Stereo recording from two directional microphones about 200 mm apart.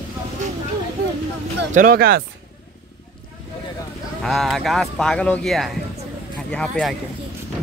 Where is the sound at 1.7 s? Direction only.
45° right (ahead or behind).